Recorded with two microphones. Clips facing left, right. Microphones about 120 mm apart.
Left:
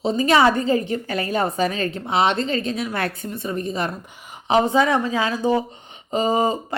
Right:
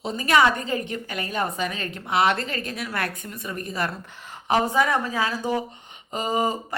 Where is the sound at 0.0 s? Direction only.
25° left (ahead or behind).